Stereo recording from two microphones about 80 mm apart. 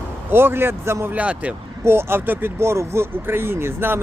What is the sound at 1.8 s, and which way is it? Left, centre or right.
Speech, right.